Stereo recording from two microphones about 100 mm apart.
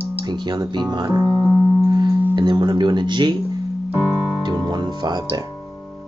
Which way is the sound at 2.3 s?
50° right (ahead or behind).